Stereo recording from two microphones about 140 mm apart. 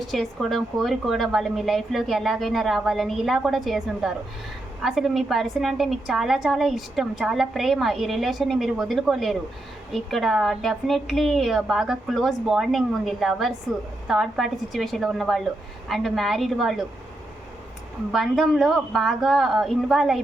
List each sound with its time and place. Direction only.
0.1 s a woman's voice: centre (ahead or behind)
18.1 s a woman's voice: centre (ahead or behind)